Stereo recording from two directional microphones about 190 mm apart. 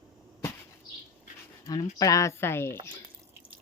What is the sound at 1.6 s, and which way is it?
Speech, 20° left (ahead or behind).